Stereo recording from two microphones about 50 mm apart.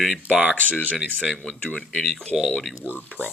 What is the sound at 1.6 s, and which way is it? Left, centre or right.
Speech, centre.